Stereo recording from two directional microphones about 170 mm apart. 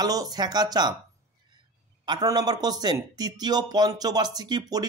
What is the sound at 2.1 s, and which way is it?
Speech, 25° right (ahead or behind).